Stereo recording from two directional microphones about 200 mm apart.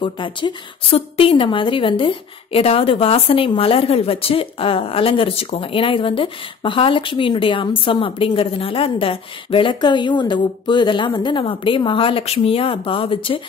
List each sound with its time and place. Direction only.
0.0 s speech: 25° left (ahead or behind)